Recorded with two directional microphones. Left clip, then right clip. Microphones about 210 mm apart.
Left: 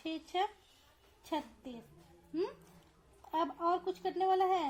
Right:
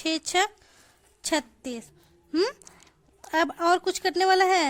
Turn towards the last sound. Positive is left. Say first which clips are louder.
# right 10 dB
turn(degrees=-50)  # may be behind; listen again after turning